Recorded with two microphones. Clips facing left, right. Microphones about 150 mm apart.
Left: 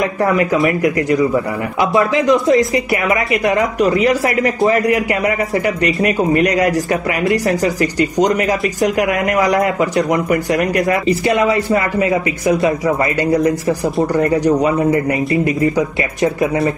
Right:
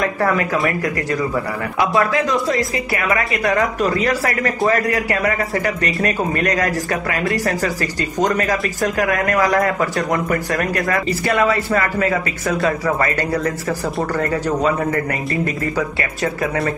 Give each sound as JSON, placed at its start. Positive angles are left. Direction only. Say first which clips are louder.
{"t": 0.0, "sound": "speech", "louder": "left 3 dB", "side_deg": 20}